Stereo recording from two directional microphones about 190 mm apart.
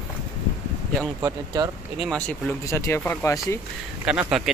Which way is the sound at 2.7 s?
15° left (ahead or behind).